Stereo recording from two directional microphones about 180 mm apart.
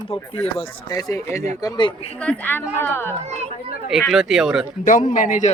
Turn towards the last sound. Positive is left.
turn(degrees=45)  # may be behind; listen again after turning